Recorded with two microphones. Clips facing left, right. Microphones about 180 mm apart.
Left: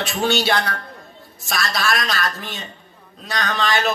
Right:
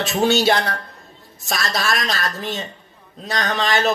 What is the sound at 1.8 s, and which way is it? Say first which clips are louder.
Speech: left 1 dB; 20° right (ahead or behind).